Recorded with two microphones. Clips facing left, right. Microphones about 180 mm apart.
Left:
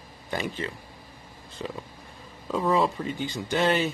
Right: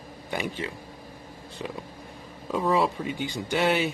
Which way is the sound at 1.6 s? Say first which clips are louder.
Left 1 dB; 10° right (ahead or behind).